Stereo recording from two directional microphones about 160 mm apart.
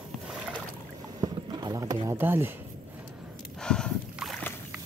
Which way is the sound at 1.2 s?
25° right (ahead or behind).